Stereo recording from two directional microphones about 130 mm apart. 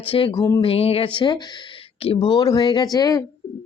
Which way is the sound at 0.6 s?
50° left (ahead or behind).